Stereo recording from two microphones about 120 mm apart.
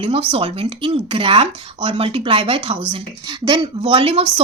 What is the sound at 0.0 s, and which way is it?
Speech, 50° right (ahead or behind).